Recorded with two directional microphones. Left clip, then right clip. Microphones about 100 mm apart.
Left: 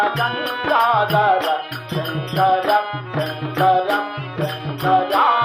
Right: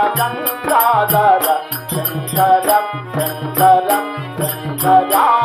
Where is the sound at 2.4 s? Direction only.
35° left (ahead or behind).